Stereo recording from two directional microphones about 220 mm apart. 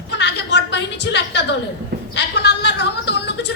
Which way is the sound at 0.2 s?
50° left (ahead or behind).